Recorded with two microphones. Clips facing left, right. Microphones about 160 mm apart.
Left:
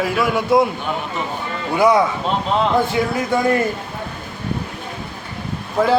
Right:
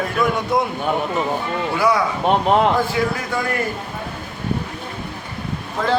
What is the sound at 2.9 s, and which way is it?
Speech, 20° left (ahead or behind).